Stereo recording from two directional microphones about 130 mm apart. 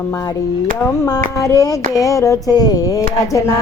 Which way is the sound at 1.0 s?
25° left (ahead or behind).